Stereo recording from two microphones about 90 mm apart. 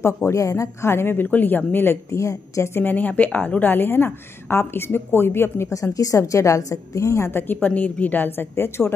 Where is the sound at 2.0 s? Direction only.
35° left (ahead or behind).